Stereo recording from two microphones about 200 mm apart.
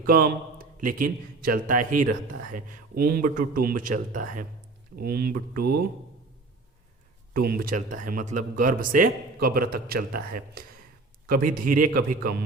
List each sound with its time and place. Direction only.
0.0 s a man's voice: 45° right (ahead or behind)
7.3 s speech: 50° right (ahead or behind)